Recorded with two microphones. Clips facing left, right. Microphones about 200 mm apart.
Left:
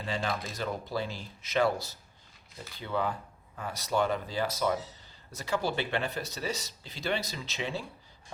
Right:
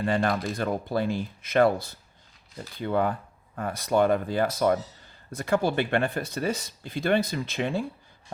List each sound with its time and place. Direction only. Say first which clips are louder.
0.0 s speech: right 8 dB; 55° right (ahead or behind)